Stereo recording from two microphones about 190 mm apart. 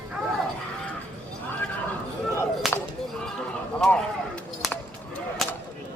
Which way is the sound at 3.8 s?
5° left (ahead or behind).